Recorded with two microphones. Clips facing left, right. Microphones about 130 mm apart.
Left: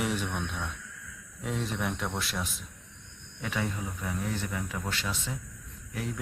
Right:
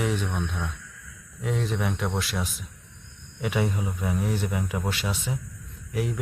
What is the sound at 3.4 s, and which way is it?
Speech, 15° right (ahead or behind).